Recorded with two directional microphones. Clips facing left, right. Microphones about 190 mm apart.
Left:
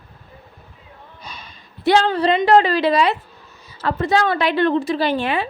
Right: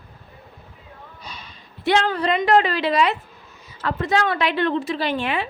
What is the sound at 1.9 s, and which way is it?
A woman's voice, 35° left (ahead or behind).